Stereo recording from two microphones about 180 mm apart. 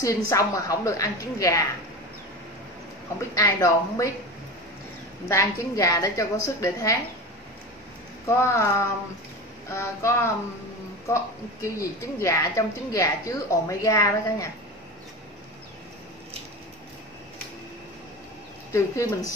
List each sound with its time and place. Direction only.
0.3 s a woman's voice: 20° left (ahead or behind)
3.3 s a woman's voice: 20° left (ahead or behind)
5.3 s speech: 20° left (ahead or behind)
8.3 s speech: 15° left (ahead or behind)
18.7 s speech: 15° left (ahead or behind)